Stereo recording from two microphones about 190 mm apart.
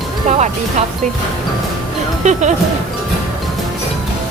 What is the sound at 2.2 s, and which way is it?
Speech, 40° right (ahead or behind).